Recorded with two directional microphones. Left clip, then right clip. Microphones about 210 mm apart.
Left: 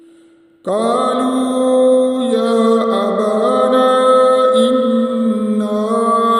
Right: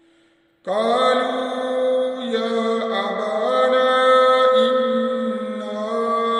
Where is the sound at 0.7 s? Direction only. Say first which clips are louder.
Left 2 dB; 50° left (ahead or behind).